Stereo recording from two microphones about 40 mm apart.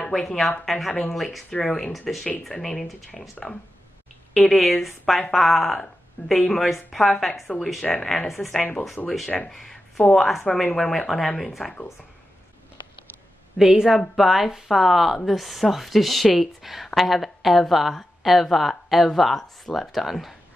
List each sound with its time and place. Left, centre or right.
0.1 s speech: centre
1.9 s speech: centre
2.5 s speech: centre
5.8 s speech: centre
7.4 s speech: centre
8.3 s speech: centre
9.0 s speech: left
9.5 s a sound: centre
10.1 s speech: centre
13.6 s speech: centre